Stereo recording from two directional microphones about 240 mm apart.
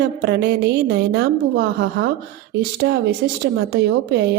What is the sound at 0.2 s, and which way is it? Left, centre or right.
Speech, right.